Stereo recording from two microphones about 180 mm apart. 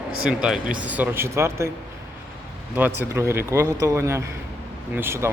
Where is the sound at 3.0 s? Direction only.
15° right (ahead or behind).